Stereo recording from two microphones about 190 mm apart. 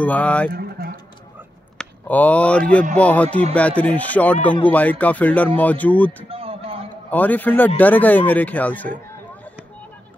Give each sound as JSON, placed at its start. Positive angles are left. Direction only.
{"t": 0.0, "sound": "speech", "side_deg": 10}
{"t": 0.5, "sound": "speech", "side_deg": -55}
{"t": 1.8, "sound": "speech", "side_deg": 10}
{"t": 6.2, "sound": "a sound", "side_deg": -30}
{"t": 7.1, "sound": "speech", "side_deg": 10}